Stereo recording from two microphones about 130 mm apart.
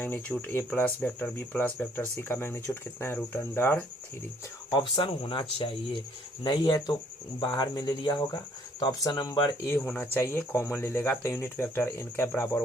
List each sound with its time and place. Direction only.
0.0 s speech: 10° left (ahead or behind)
4.7 s speech: 40° left (ahead or behind)
9.6 s speech: 15° left (ahead or behind)